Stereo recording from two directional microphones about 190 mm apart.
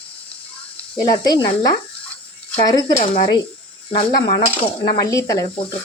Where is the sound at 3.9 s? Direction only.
25° left (ahead or behind).